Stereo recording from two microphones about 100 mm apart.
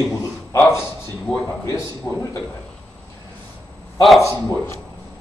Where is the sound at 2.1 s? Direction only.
25° left (ahead or behind).